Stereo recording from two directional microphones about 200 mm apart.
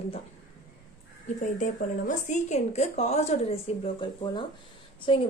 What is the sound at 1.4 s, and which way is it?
A woman's voice, 40° left (ahead or behind).